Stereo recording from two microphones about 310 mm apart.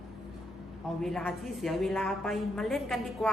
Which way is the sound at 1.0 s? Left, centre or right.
Centre.